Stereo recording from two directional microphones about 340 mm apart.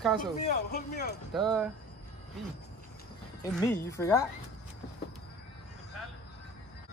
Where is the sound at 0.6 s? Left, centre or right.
Left.